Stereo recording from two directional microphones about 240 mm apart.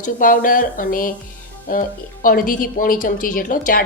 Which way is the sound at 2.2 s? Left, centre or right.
Left.